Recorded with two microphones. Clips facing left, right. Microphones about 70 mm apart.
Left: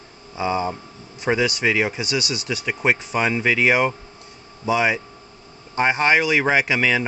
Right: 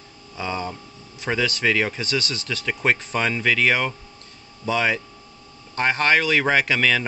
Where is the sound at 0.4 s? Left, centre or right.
Centre.